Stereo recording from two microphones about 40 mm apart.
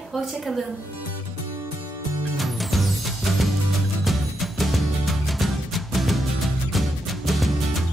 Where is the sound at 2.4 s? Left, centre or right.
Centre.